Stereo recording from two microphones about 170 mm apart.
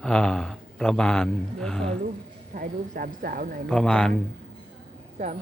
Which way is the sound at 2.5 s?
55° right (ahead or behind).